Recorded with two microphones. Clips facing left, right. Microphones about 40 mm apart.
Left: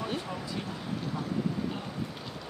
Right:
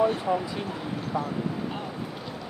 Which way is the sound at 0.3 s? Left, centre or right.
Right.